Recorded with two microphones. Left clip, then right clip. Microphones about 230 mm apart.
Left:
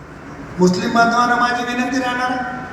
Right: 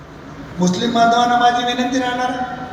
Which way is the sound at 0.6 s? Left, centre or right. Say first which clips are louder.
Left 1 dB; left.